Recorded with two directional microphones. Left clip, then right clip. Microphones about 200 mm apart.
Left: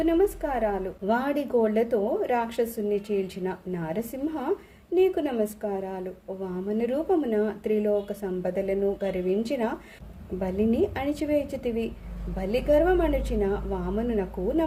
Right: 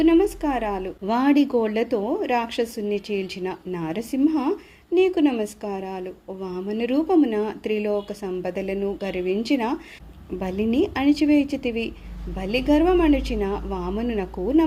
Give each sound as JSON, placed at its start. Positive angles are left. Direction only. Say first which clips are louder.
{"t": 0.0, "sound": "a woman's voice", "louder": "right 5 dB", "side_deg": -30}